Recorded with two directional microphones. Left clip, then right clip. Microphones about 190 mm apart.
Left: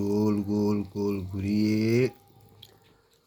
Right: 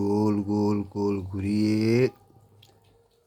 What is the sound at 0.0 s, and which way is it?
Mantra, 30° right (ahead or behind).